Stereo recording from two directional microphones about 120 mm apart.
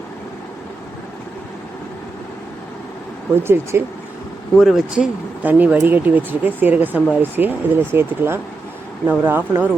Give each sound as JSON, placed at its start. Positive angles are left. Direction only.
{"t": 3.3, "sound": "speech", "side_deg": -20}
{"t": 4.5, "sound": "speech", "side_deg": 0}